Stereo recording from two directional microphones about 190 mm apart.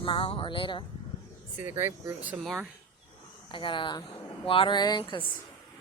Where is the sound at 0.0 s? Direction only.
25° left (ahead or behind).